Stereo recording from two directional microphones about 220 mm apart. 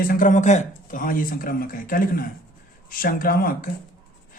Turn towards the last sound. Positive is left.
turn(degrees=40)  # may be behind; listen again after turning